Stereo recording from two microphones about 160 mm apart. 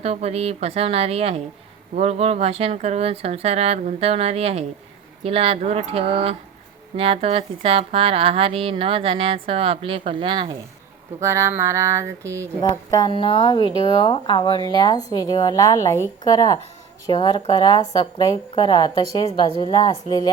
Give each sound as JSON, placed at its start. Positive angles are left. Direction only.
{"t": 0.0, "sound": "a woman's voice", "side_deg": -40}
{"t": 11.2, "sound": "a sound", "side_deg": -15}
{"t": 12.9, "sound": "speech", "side_deg": 30}